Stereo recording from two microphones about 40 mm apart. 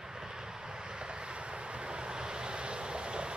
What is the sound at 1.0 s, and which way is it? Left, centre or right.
Vehicle, right.